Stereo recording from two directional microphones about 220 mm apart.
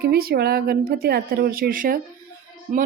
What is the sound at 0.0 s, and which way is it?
A woman's voice, 45° right (ahead or behind).